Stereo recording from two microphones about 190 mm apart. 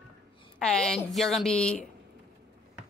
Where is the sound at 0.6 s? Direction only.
5° left (ahead or behind).